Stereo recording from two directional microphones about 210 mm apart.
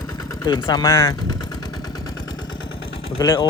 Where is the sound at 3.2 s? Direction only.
20° left (ahead or behind).